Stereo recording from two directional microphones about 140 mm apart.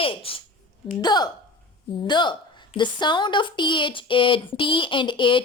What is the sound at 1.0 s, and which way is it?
A woman's voice, 30° left (ahead or behind).